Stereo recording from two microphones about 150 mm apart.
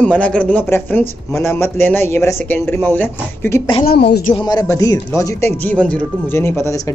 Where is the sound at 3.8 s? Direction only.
90° left.